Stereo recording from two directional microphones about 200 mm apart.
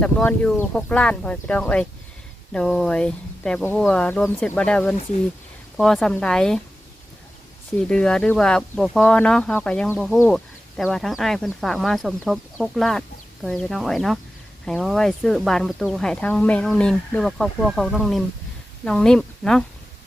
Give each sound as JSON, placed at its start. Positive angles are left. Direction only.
{"t": 0.0, "sound": "speech", "side_deg": 5}
{"t": 7.8, "sound": "speech", "side_deg": 5}